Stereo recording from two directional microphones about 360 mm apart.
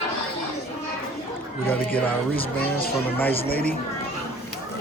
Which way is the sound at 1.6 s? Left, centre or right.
Centre.